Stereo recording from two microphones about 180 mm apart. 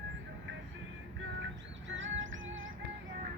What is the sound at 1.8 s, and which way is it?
Music, 90° right.